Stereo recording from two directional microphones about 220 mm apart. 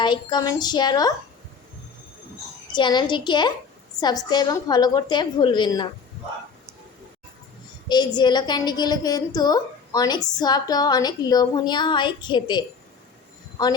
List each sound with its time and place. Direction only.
0.0 s a woman's voice: 20° left (ahead or behind)
2.7 s a woman's voice: 20° left (ahead or behind)
7.9 s a woman's voice: 20° left (ahead or behind)